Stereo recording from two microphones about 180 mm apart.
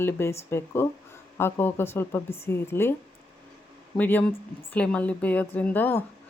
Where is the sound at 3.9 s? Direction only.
10° left (ahead or behind).